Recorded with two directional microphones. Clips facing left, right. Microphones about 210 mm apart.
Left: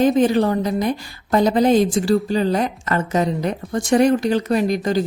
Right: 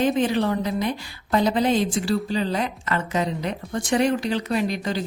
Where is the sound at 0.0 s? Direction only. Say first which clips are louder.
Left 5 dB; 45° left (ahead or behind).